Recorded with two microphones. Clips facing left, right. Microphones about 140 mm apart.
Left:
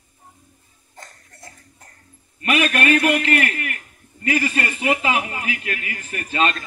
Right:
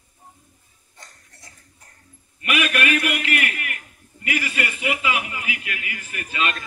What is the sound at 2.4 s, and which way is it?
A man's voice, 35° left (ahead or behind).